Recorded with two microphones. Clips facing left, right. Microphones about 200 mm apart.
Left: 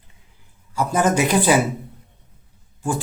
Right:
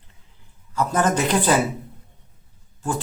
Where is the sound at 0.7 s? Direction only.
10° left (ahead or behind).